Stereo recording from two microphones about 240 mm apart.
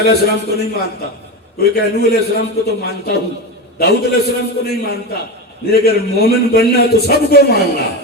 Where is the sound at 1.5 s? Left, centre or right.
Left.